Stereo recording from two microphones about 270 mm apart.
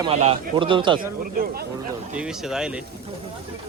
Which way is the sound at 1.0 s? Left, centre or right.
Right.